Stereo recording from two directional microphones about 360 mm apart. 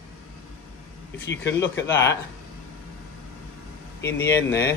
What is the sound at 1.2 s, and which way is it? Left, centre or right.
Speech, left.